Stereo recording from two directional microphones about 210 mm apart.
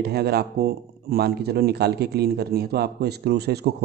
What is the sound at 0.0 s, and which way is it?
Speech, 50° right (ahead or behind).